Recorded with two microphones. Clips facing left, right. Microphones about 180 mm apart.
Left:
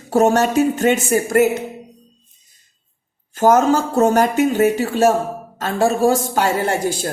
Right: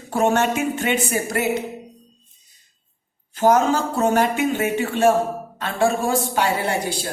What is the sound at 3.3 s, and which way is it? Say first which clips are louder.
A man's voice: left 3 dB; 45° left (ahead or behind).